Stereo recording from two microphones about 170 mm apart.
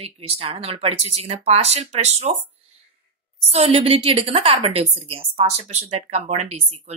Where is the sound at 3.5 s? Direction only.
35° right (ahead or behind).